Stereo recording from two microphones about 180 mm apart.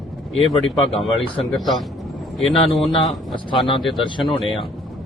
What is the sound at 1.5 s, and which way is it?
Speech, centre (ahead or behind).